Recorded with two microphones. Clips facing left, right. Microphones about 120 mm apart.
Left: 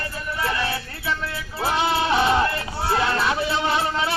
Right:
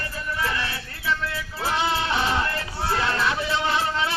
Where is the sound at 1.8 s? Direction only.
15° left (ahead or behind).